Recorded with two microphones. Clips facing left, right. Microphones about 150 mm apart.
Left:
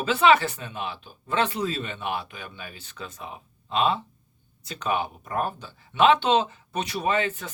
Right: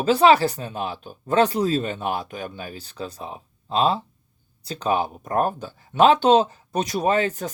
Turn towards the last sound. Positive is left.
turn(degrees=-40)  # may be behind; listen again after turning